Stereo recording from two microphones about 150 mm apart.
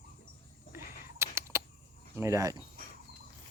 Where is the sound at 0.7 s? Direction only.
15° right (ahead or behind).